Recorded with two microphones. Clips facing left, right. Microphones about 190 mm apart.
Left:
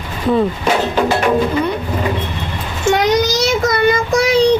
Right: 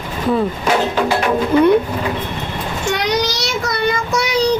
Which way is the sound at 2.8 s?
45° left (ahead or behind).